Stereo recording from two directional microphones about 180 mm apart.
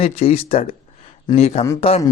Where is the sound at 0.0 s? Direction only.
35° left (ahead or behind).